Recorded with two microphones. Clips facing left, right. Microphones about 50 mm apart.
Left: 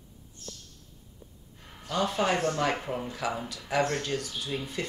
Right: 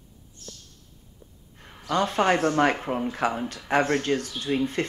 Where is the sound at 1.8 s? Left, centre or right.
Right.